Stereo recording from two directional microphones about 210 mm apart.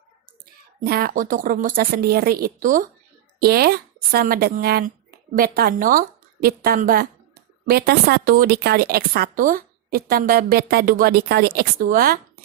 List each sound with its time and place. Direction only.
0.8 s a woman's voice: 45° right (ahead or behind)